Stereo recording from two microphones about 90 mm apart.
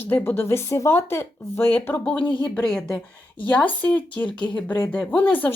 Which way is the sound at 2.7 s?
5° left (ahead or behind).